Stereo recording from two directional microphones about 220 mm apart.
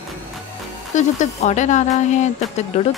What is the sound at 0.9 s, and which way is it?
Speech, 35° left (ahead or behind).